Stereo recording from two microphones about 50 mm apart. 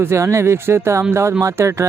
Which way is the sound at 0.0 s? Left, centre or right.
Right.